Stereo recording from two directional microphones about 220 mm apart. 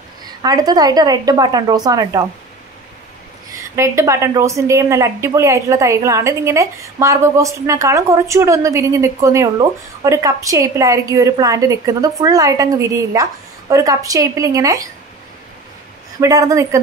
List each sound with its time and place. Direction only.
0.4 s a woman's voice: 15° right (ahead or behind)
3.7 s a woman's voice: 10° right (ahead or behind)
16.2 s a woman's voice: 15° right (ahead or behind)